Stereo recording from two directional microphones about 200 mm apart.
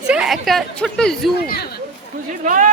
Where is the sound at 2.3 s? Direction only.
40° right (ahead or behind).